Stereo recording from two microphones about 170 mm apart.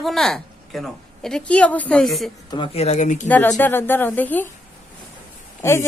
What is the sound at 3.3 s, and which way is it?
A woman's voice, 10° left (ahead or behind).